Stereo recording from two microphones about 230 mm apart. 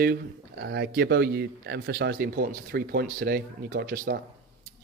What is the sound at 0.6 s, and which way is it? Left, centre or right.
Speech, right.